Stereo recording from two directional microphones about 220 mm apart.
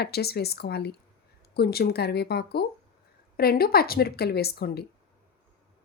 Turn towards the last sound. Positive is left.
turn(degrees=45)  # may be behind; listen again after turning